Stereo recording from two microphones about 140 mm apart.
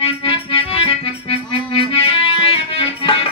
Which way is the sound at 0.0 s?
40° left (ahead or behind).